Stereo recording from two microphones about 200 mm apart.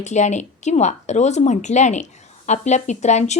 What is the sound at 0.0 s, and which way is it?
A woman's voice, 35° left (ahead or behind).